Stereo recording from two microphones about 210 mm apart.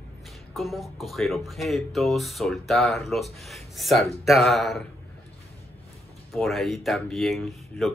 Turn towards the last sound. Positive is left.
turn(degrees=0)  # may be behind; listen again after turning